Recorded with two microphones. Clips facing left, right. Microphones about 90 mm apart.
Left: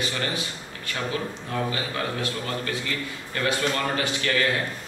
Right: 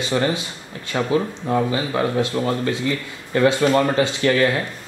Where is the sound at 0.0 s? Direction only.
25° right (ahead or behind).